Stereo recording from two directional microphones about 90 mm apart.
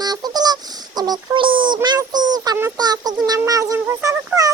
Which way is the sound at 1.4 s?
70° right (ahead or behind).